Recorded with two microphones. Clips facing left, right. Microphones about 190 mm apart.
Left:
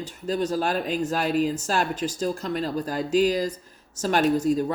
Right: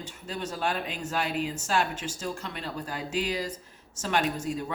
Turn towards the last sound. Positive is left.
turn(degrees=40)  # may be behind; listen again after turning